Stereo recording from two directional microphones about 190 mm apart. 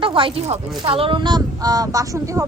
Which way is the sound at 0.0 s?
25° right (ahead or behind).